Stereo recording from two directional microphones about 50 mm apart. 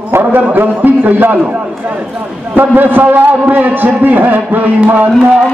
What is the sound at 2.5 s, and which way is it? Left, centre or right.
A man's voice, right.